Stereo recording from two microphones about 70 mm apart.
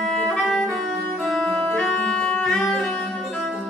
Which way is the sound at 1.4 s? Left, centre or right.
Centre.